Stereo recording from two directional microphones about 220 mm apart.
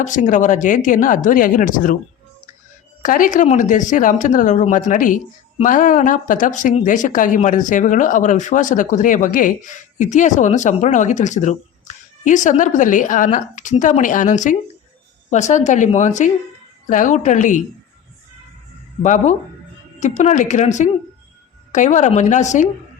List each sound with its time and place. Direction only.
0.0 s speech: 35° left (ahead or behind)
3.0 s speech: 40° left (ahead or behind)
19.0 s speech: 35° left (ahead or behind)